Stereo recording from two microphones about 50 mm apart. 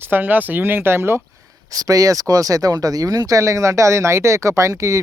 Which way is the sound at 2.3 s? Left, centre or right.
Right.